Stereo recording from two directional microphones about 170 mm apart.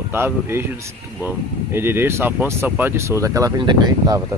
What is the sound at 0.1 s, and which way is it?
Speech, 15° right (ahead or behind).